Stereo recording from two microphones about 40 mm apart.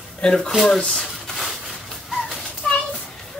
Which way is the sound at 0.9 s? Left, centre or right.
Centre.